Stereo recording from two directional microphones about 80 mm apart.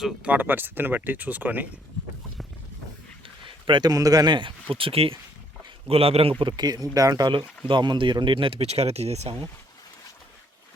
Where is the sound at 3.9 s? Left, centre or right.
Right.